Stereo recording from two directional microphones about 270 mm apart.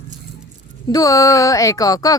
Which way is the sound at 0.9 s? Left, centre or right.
Centre.